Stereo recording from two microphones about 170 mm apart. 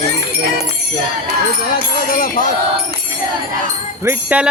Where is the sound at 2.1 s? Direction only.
55° left (ahead or behind).